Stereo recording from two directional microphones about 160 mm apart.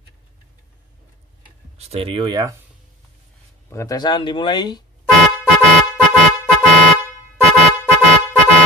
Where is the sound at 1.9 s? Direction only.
35° right (ahead or behind).